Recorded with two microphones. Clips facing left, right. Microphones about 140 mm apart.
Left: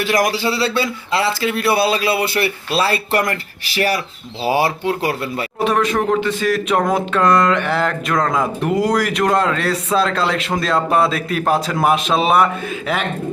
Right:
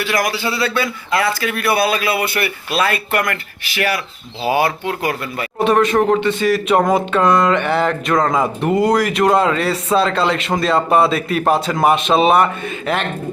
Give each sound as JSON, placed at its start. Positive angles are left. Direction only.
{"t": 0.0, "sound": "a man's voice", "side_deg": 40}
{"t": 5.5, "sound": "speech", "side_deg": 0}